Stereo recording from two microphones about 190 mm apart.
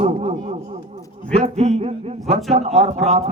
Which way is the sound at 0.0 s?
35° right (ahead or behind).